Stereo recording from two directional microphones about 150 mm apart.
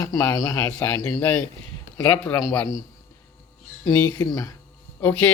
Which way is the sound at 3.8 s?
25° left (ahead or behind).